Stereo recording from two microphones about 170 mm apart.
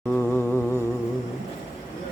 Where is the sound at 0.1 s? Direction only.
10° left (ahead or behind).